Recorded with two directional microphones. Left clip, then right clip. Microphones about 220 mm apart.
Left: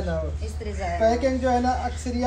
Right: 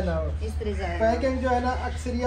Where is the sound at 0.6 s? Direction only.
5° left (ahead or behind).